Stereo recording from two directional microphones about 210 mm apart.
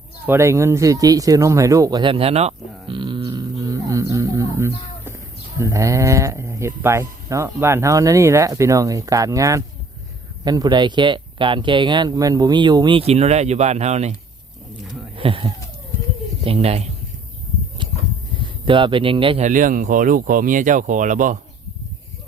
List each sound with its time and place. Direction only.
0.3 s speech: 15° right (ahead or behind); by 14.1 s 30° right (ahead or behind)
14.8 s insect: centre (ahead or behind)
15.1 s speech: 25° right (ahead or behind)
17.8 s a sound: 20° right (ahead or behind)
18.3 s speech: 25° right (ahead or behind)
19.5 s speech: 40° right (ahead or behind)